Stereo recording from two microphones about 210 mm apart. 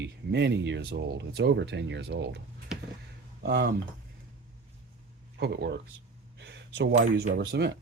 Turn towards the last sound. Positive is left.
turn(degrees=-55)  # may be behind; listen again after turning